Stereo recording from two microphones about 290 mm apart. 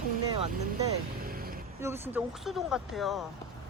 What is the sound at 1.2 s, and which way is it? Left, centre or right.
Vehicle, right.